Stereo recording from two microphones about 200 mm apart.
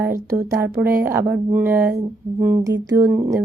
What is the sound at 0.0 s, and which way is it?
Speech, 15° right (ahead or behind).